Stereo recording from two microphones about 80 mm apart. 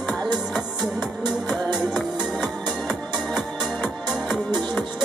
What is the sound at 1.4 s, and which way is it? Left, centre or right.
Music, centre.